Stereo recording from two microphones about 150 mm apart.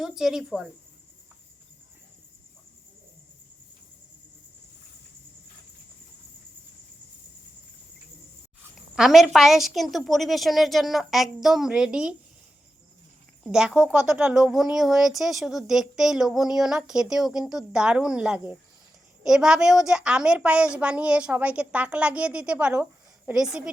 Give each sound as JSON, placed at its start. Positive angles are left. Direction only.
{"t": 0.2, "sound": "a woman's voice", "side_deg": -5}
{"t": 9.0, "sound": "a woman's voice", "side_deg": 0}
{"t": 13.4, "sound": "a woman's voice", "side_deg": -5}